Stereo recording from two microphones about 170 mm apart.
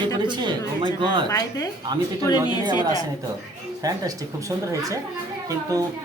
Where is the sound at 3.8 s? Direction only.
20° right (ahead or behind).